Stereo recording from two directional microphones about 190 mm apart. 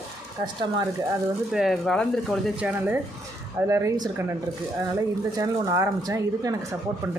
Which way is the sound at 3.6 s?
15° right (ahead or behind).